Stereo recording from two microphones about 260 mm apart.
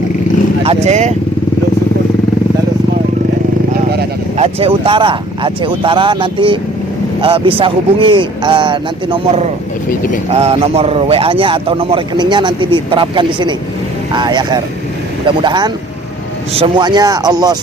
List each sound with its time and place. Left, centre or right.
0.9 s a man's voice: right
4.4 s a man's voice: right